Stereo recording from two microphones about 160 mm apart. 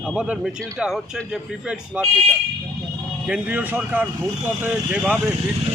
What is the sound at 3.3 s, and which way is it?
Speech, 10° right (ahead or behind).